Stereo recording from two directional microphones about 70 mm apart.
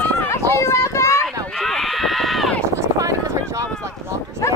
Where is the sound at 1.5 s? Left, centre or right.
Centre.